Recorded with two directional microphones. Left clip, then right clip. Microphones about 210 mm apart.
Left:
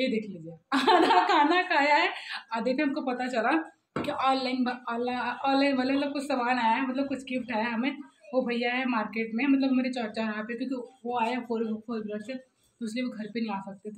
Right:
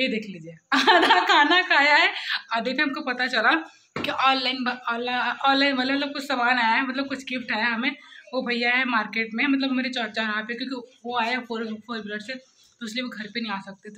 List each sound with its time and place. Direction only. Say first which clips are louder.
0.0 s a woman's voice: right 3 dB; 5° right (ahead or behind)